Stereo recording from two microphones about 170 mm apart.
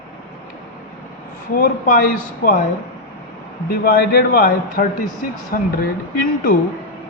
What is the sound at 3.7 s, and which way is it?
A man's voice, 60° left (ahead or behind).